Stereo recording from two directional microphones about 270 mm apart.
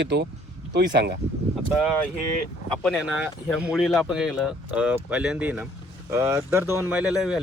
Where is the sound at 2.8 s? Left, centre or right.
Centre.